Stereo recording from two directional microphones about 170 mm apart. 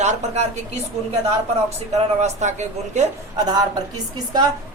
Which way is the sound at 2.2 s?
45° right (ahead or behind).